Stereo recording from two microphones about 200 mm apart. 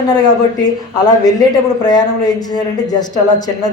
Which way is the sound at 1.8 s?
20° left (ahead or behind).